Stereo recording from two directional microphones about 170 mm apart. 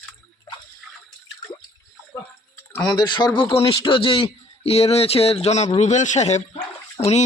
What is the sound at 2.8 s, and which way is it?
Speech, 25° left (ahead or behind).